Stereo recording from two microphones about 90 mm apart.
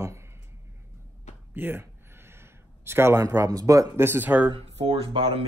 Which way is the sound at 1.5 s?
25° right (ahead or behind).